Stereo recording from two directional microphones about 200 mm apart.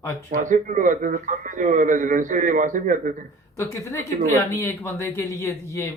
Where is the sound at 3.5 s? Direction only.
15° left (ahead or behind).